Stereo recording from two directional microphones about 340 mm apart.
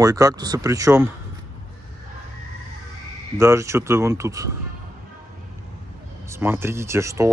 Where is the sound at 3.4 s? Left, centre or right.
Centre.